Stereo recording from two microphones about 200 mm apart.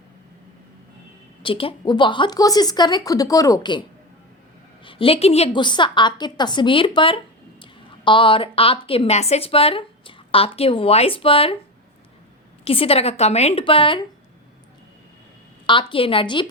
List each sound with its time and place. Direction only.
1.4 s a woman's voice: 25° left (ahead or behind)
4.9 s a woman's voice: 25° left (ahead or behind)
12.6 s a woman's voice: 30° left (ahead or behind)
15.6 s a woman's voice: 25° left (ahead or behind)